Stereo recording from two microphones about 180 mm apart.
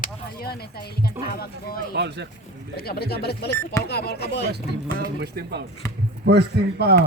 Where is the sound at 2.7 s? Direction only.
60° left (ahead or behind).